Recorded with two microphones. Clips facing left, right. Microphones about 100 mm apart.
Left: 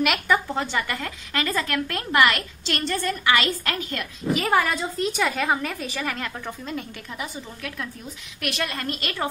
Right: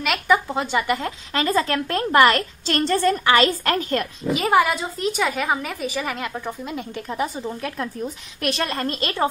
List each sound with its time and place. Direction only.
0.0 s speech: centre (ahead or behind)
0.5 s a woman's voice: 15° right (ahead or behind); by 4.1 s 40° right (ahead or behind)
4.3 s a woman's voice: 15° right (ahead or behind)
5.1 s a woman's voice: 5° right (ahead or behind)
6.9 s a woman's voice: 35° right (ahead or behind)